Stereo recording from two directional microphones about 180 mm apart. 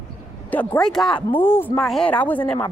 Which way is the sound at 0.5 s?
10° left (ahead or behind).